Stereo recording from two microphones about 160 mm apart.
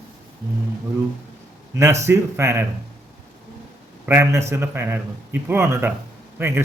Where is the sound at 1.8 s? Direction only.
15° right (ahead or behind).